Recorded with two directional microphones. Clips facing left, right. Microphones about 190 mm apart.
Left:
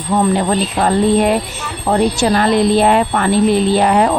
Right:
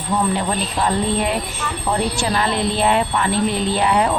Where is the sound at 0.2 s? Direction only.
50° left (ahead or behind).